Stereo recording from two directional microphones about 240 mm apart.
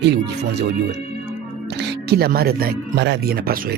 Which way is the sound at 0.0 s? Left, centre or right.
Right.